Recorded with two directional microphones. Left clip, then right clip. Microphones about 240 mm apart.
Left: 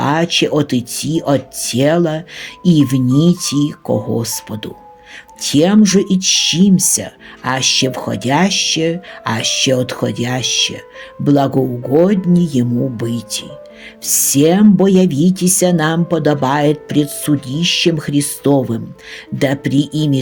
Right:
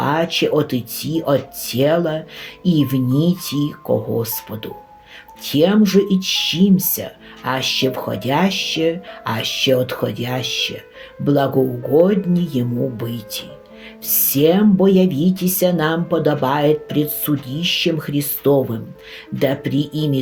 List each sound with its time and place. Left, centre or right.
0.0 s speech: left